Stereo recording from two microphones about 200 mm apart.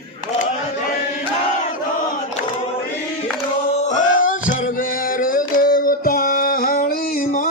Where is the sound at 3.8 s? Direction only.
40° left (ahead or behind).